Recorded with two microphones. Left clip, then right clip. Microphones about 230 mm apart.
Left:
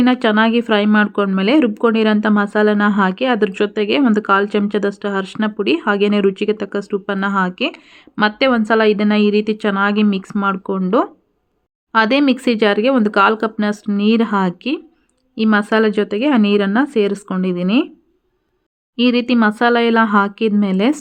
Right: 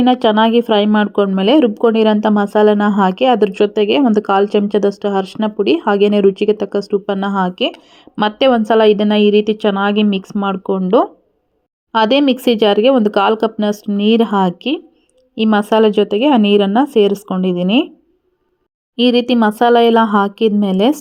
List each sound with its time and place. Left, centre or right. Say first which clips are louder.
0.0 s speech: right 3 dB; centre
9.9 s speech: right 2 dB; left
10.2 s speech: right 1 dB; centre
18.9 s speech: right 3 dB; centre